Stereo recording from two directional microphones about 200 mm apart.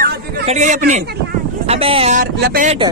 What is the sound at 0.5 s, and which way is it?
Speech, 35° right (ahead or behind).